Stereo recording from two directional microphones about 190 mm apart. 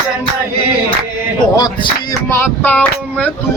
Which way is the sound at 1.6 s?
20° left (ahead or behind).